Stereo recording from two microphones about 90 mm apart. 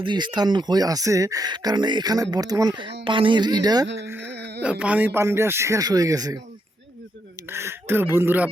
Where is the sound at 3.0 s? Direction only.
75° right (ahead or behind); by 3.8 s 50° right (ahead or behind).